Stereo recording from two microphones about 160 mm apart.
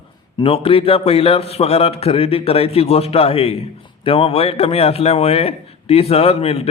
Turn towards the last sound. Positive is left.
turn(degrees=40)  # may be behind; listen again after turning